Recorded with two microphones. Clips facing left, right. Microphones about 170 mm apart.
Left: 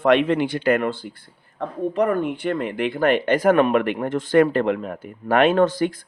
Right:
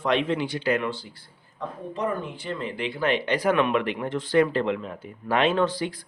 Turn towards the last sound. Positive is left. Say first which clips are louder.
# left 6 dB
turn(degrees=50)  # may be behind; listen again after turning